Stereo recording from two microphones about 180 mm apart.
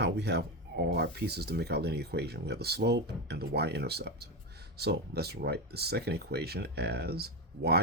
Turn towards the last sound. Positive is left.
turn(degrees=-60)  # may be behind; listen again after turning